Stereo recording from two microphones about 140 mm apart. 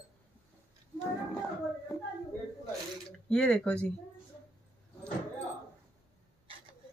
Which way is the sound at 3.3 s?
5° left (ahead or behind).